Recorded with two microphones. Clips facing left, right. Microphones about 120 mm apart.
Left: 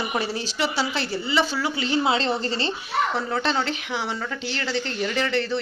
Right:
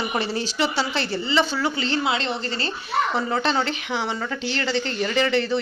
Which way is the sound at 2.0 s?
30° left (ahead or behind).